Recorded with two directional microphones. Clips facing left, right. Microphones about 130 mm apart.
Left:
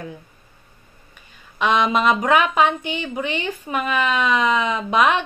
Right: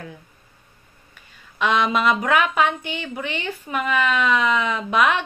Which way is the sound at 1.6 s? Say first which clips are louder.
Left 2 dB; 20° left (ahead or behind).